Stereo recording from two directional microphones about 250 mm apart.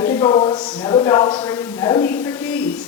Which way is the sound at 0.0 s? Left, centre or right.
Centre.